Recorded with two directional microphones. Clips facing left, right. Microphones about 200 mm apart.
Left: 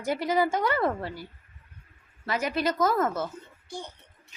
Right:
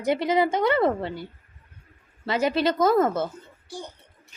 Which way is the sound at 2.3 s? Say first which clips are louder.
Right 5 dB; 30° right (ahead or behind).